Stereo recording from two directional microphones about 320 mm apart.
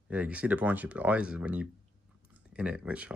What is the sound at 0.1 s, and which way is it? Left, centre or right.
Speech, centre.